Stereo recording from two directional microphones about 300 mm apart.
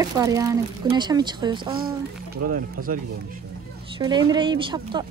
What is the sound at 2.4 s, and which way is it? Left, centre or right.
Speech, right.